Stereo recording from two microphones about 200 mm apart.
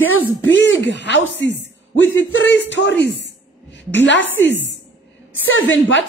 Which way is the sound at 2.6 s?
65° left (ahead or behind).